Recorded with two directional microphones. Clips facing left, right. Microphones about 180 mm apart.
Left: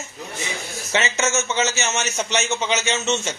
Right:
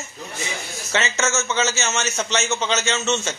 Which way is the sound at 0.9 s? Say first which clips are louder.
Left 1 dB; 15° left (ahead or behind).